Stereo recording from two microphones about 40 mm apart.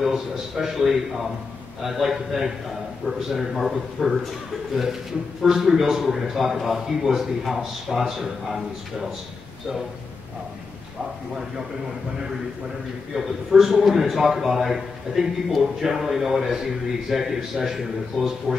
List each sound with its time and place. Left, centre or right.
0.0 s a man's voice: centre
13.1 s a man's voice: centre